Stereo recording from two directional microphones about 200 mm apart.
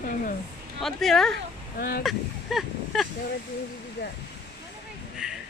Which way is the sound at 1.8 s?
50° left (ahead or behind).